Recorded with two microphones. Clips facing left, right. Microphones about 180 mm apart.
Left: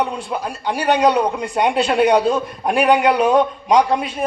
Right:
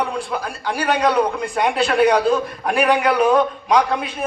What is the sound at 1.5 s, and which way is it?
A man's voice, 25° left (ahead or behind).